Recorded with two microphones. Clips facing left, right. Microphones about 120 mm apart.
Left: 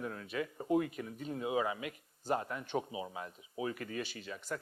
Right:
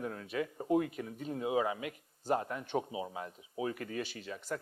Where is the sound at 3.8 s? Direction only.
35° right (ahead or behind).